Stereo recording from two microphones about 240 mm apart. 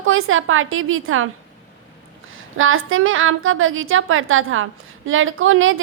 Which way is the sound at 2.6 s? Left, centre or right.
Right.